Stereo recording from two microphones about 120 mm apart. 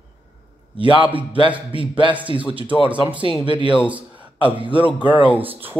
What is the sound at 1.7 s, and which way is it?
Speech, 45° right (ahead or behind).